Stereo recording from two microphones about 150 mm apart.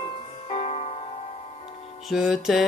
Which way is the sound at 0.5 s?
45° left (ahead or behind).